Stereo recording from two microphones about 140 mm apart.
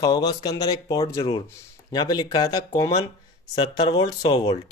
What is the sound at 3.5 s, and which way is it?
Speech, 35° left (ahead or behind).